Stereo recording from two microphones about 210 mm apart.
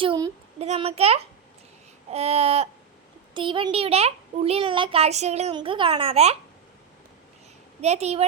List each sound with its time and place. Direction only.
0.0 s a sound: 25° right (ahead or behind)
2.0 s a child's voice: 30° right (ahead or behind)
7.8 s a woman's voice: 30° right (ahead or behind)